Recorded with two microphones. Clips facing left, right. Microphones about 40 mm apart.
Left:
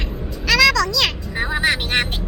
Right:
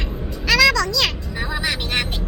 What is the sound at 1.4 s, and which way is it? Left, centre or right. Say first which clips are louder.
Vehicle: left 5 dB; left.